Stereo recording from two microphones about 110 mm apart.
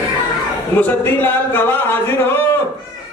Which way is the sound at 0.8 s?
15° left (ahead or behind).